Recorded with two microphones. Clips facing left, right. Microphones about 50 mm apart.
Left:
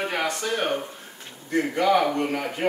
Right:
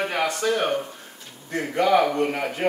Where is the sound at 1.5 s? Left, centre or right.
Centre.